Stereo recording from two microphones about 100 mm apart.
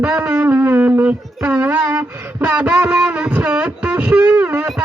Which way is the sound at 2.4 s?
15° right (ahead or behind).